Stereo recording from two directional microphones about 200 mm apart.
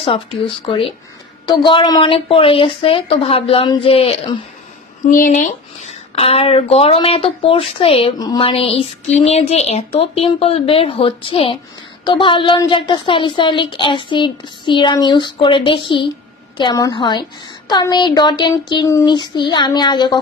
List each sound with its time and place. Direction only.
0.0 s a woman's voice: 25° left (ahead or behind)
5.1 s a woman's voice: 40° left (ahead or behind); by 20.2 s 20° left (ahead or behind)